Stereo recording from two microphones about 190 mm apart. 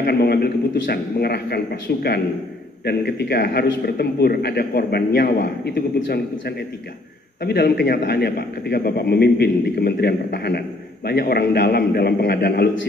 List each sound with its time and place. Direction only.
0.0 s a man's voice: 55° left (ahead or behind)